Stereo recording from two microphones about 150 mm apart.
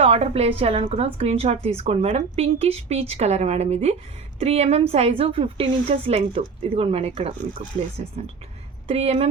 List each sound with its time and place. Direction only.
0.0 s a woman's voice: 40° right (ahead or behind)
8.9 s a woman's voice: 45° right (ahead or behind)